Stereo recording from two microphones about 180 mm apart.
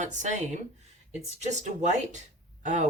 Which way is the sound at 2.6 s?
40° right (ahead or behind).